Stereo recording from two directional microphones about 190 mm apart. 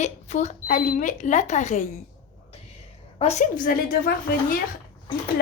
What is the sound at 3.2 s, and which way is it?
Speech, 35° left (ahead or behind).